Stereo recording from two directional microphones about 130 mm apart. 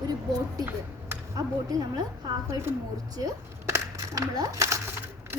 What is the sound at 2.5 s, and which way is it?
Speech, 20° right (ahead or behind).